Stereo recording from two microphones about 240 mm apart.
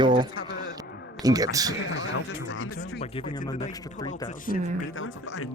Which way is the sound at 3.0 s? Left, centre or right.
Left.